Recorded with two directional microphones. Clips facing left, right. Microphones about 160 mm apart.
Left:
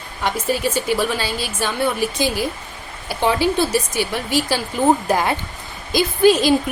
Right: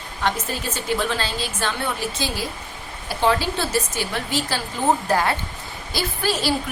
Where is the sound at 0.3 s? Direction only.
10° left (ahead or behind).